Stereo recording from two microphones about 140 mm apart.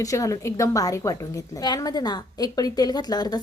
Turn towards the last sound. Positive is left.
turn(degrees=30)  # may be behind; listen again after turning